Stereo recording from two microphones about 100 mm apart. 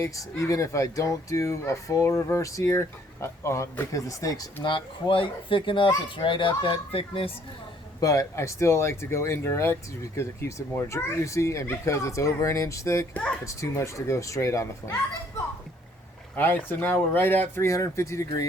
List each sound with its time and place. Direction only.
0.0 s speech: 30° left (ahead or behind)
4.6 s speech: 55° left (ahead or behind)
8.0 s speech: 35° left (ahead or behind)
13.1 s a sound: 10° left (ahead or behind)
13.4 s speech: 30° left (ahead or behind)
16.3 s speech: 20° left (ahead or behind)